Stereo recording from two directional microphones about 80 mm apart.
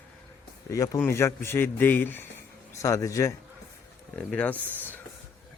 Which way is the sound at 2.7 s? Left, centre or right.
Left.